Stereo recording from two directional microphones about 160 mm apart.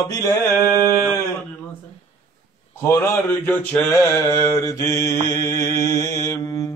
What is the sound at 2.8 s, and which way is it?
Mantra, 15° left (ahead or behind).